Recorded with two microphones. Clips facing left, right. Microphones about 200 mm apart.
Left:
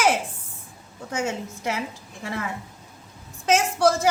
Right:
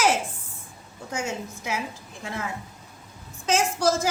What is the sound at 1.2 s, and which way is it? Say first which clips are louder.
Speech: left 5 dB; 60° left (ahead or behind).